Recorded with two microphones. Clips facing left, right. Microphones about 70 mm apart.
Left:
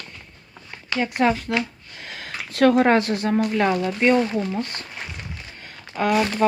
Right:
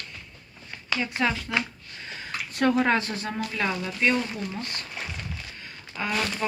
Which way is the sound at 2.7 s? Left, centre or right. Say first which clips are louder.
Left 6 dB; left.